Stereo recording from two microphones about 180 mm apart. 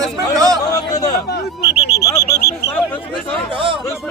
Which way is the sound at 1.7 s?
65° left (ahead or behind).